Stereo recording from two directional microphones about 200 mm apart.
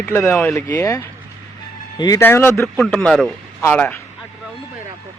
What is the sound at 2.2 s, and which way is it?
Speech, 10° left (ahead or behind).